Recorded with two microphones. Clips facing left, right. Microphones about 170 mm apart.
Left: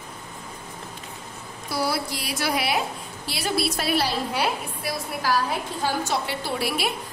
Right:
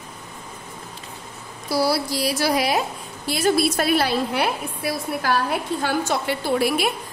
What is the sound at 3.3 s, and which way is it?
A woman's voice, 50° right (ahead or behind).